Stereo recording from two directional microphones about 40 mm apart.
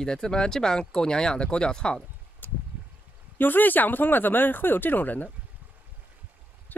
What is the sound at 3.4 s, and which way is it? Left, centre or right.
Speech, left.